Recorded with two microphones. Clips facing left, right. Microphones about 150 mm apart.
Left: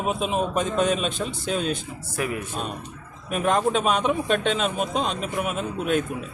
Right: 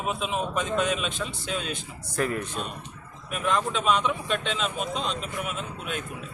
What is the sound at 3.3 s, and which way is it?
A man's voice, 45° left (ahead or behind).